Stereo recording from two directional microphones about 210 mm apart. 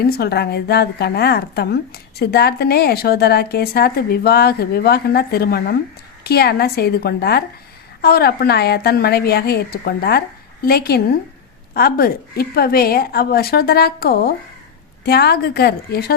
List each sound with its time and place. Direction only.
0.0 s a woman's voice: 50° left (ahead or behind)